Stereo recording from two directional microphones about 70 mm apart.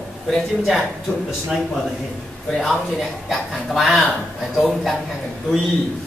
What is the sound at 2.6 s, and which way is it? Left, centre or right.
Speech, centre.